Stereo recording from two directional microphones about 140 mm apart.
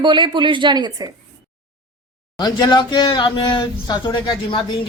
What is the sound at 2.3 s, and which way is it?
Speech, 30° left (ahead or behind).